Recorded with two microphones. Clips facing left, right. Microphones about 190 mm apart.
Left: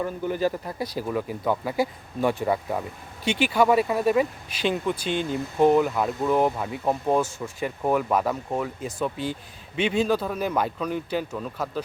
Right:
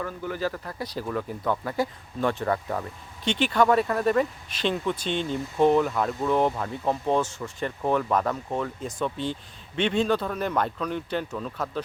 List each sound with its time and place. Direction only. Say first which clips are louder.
0.0 s speech: left 4 dB; 20° left (ahead or behind)